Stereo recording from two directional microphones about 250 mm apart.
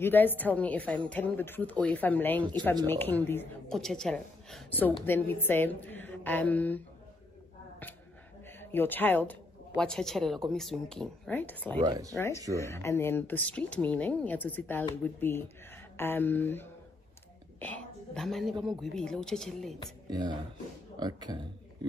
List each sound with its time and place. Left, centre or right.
0.0 s a woman's voice: centre
8.5 s a woman's voice: centre
11.8 s speech: centre
12.2 s a woman's voice: centre
20.1 s speech: centre